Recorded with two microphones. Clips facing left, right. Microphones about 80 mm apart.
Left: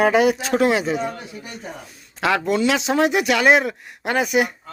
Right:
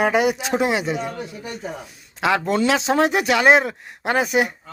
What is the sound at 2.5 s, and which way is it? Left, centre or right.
Speech, right.